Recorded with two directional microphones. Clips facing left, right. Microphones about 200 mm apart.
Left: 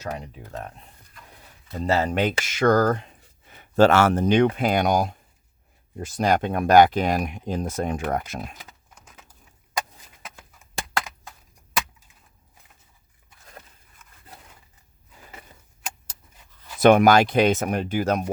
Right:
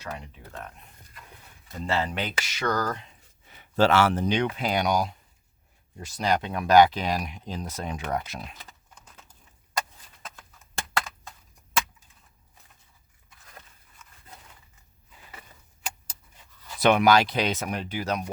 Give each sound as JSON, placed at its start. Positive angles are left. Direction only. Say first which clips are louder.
{"t": 0.0, "sound": "speech", "louder": "left 5 dB", "side_deg": 40}
{"t": 1.8, "sound": "speech", "louder": "left 6 dB", "side_deg": 40}
{"t": 16.8, "sound": "speech", "louder": "left 5 dB", "side_deg": 50}